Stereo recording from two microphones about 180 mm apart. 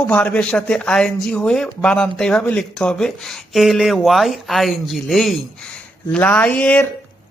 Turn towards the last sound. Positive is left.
turn(degrees=10)  # may be behind; listen again after turning